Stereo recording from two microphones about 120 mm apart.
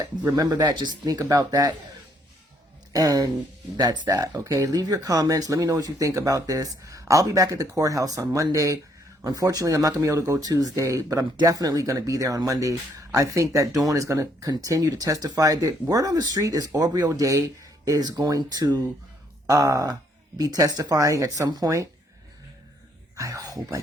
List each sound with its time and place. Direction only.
0.3 s speech: 35° right (ahead or behind)
2.9 s speech: 30° right (ahead or behind)
23.1 s speech: 25° right (ahead or behind)